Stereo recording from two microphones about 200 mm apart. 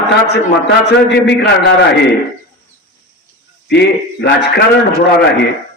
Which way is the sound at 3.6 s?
60° left (ahead or behind).